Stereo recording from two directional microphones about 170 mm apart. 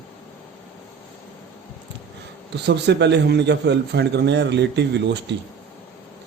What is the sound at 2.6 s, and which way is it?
Speech, 85° right.